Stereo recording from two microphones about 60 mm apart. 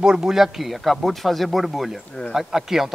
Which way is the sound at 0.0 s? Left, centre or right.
Centre.